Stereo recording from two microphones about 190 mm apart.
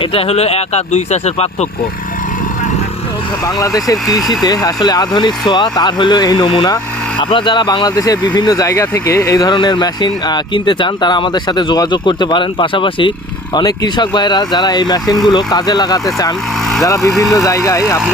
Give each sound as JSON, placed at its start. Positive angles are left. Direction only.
{"t": 0.0, "sound": "speech", "side_deg": 30}
{"t": 3.4, "sound": "speech", "side_deg": 20}